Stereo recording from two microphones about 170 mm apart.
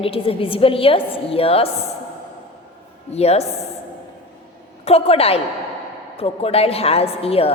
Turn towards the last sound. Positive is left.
turn(degrees=35)  # may be behind; listen again after turning